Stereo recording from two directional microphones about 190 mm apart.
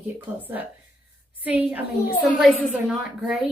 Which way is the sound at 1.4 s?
10° right (ahead or behind).